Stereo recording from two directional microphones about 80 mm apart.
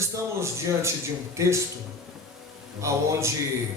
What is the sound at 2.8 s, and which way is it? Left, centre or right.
Speech, right.